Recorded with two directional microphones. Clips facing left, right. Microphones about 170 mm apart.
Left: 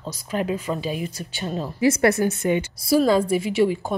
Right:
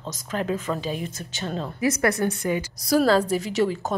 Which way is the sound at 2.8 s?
10° left (ahead or behind).